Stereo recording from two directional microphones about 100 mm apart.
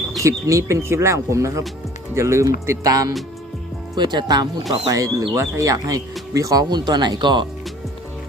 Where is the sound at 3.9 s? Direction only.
45° right (ahead or behind).